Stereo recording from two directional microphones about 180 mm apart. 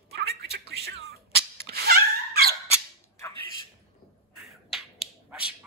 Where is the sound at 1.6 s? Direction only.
60° right (ahead or behind).